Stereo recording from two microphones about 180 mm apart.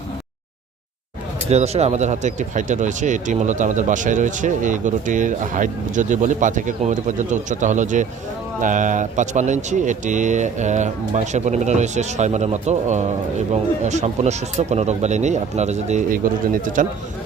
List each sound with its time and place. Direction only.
1.5 s speech: 35° right (ahead or behind)